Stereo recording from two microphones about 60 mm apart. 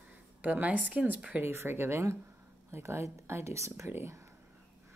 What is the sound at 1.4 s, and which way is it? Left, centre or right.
A woman's voice, right.